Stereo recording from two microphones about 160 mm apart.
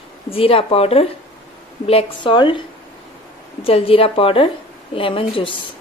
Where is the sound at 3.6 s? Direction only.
35° left (ahead or behind).